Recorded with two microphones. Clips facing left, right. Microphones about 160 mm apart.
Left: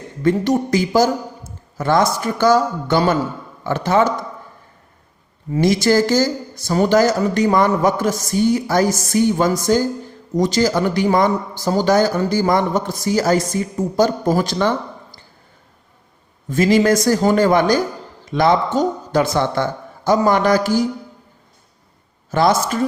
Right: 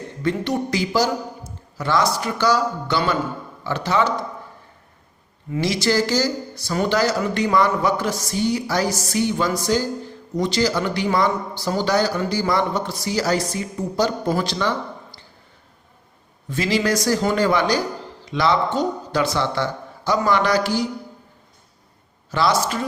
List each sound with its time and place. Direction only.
0.2 s a man's voice: 45° left (ahead or behind)
5.5 s a man's voice: 50° left (ahead or behind)
16.5 s a man's voice: 45° left (ahead or behind)
22.3 s a man's voice: 50° left (ahead or behind)